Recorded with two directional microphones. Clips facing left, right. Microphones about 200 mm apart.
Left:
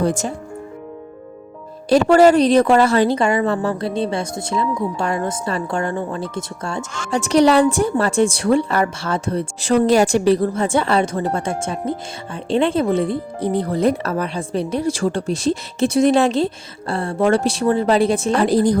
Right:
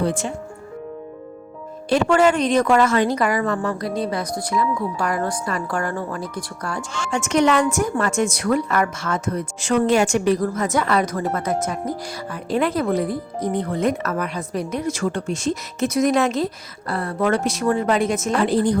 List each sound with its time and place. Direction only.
0.0 s speech: 45° left (ahead or behind)
1.9 s a woman's voice: 40° left (ahead or behind)